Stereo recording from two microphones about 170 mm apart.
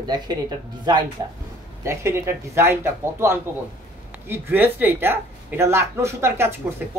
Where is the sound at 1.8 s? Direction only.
15° right (ahead or behind).